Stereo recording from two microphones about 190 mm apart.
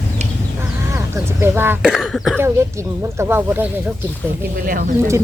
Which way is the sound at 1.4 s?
10° right (ahead or behind).